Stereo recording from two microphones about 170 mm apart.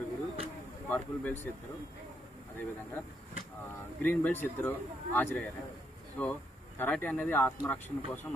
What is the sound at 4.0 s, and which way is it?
Speech, 10° left (ahead or behind).